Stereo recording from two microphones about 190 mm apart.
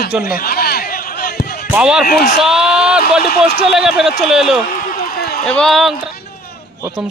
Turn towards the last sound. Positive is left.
turn(degrees=0)  # may be behind; listen again after turning